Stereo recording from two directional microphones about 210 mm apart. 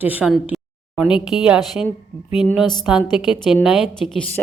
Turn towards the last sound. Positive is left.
turn(degrees=0)  # may be behind; listen again after turning